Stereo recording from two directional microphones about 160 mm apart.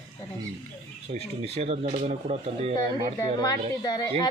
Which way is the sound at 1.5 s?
40° right (ahead or behind).